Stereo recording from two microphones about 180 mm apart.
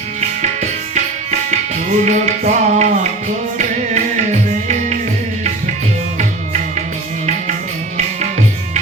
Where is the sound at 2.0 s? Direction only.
40° right (ahead or behind).